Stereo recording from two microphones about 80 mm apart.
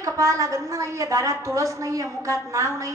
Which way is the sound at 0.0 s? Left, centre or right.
Right.